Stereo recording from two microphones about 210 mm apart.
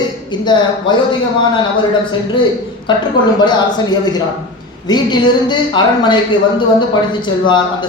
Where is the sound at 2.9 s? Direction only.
20° left (ahead or behind).